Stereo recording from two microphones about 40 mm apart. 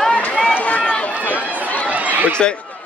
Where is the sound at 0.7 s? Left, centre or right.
Left.